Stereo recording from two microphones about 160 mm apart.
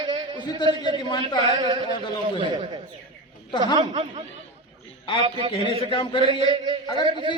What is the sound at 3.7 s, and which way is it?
Speech, 35° right (ahead or behind).